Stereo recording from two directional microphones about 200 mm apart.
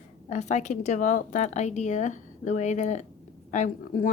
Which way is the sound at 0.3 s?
35° left (ahead or behind).